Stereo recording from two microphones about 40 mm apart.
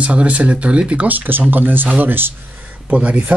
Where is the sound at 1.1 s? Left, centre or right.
Right.